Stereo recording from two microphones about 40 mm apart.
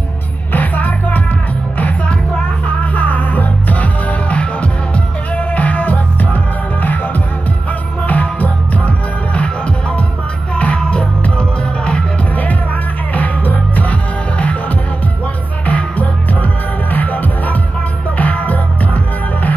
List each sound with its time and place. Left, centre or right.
0.5 s music: left
2.8 s music: left
8.1 s music: left
10.5 s music: left
13.1 s music: left
15.6 s music: left